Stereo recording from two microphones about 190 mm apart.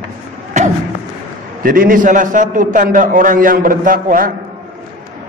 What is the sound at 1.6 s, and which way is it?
A man's voice, 50° right (ahead or behind).